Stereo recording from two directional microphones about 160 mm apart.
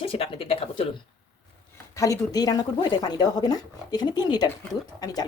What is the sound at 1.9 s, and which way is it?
A woman's voice, 20° left (ahead or behind).